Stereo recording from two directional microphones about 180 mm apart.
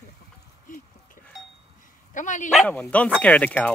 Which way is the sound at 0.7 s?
50° left (ahead or behind).